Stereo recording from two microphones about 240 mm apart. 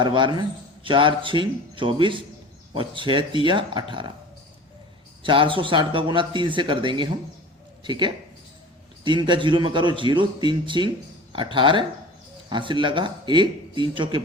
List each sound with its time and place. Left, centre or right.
0.0 s a man's voice: centre
5.2 s a man's voice: right